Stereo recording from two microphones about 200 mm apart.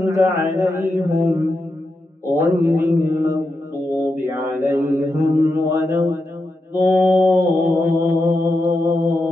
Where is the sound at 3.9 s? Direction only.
10° right (ahead or behind).